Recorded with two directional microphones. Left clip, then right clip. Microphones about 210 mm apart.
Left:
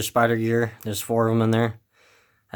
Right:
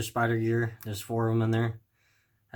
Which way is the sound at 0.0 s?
50° left (ahead or behind).